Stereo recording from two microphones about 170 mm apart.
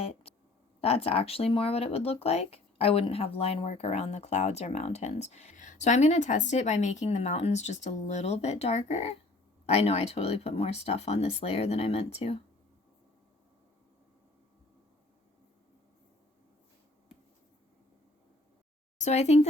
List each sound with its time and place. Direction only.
0.0 s a sound: 35° left (ahead or behind)
0.8 s speech: 35° left (ahead or behind)
18.9 s speech: 40° left (ahead or behind)